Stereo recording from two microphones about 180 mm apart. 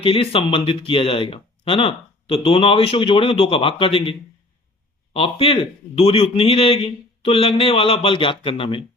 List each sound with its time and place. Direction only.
0.0 s speech: 30° left (ahead or behind)
5.1 s a man's voice: 30° left (ahead or behind)